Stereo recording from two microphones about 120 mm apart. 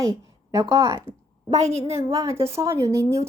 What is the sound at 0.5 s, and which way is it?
Speech, 30° right (ahead or behind).